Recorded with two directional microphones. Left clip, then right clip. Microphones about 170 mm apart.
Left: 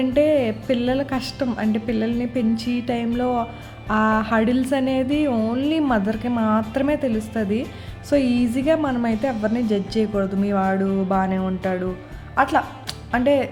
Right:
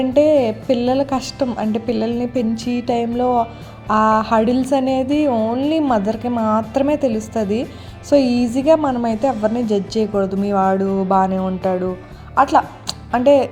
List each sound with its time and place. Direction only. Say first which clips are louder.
0.1 s a woman's voice: right 5 dB; 15° right (ahead or behind)
5.3 s speech: right 5 dB; centre (ahead or behind)
5.5 s a woman's voice: right 4 dB; 10° right (ahead or behind)
6.3 s speech: right 3 dB; 5° left (ahead or behind)
6.7 s a woman's voice: right 4 dB; 15° right (ahead or behind)
8.8 s speech: right 4 dB; 5° right (ahead or behind)
9.0 s a woman's voice: right 5 dB; 15° right (ahead or behind)
11.3 s a woman's voice: right 5 dB; 5° right (ahead or behind)